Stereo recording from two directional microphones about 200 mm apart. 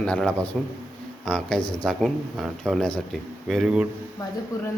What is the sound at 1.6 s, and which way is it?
Speech, 25° left (ahead or behind).